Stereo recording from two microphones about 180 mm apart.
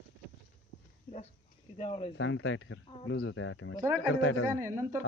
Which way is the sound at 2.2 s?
90° left.